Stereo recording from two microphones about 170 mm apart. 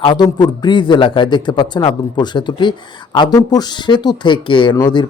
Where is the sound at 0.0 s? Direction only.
25° left (ahead or behind).